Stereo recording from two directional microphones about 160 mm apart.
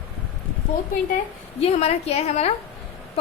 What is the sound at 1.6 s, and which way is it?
Speech, 40° left (ahead or behind).